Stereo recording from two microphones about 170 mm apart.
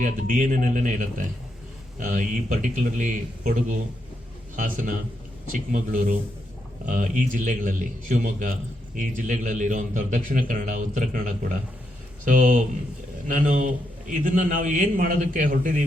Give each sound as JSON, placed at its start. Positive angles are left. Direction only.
{"t": 0.0, "sound": "a man's voice", "side_deg": -50}